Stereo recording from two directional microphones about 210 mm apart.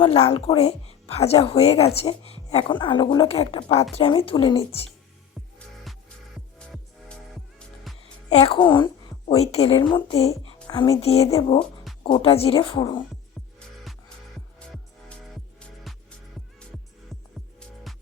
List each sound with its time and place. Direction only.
0.0 s a woman's voice: 25° left (ahead or behind)
8.3 s a woman's voice: 30° left (ahead or behind)
10.4 s music: 20° left (ahead or behind)
11.0 s a woman's voice: 30° left (ahead or behind)
15.8 s music: centre (ahead or behind)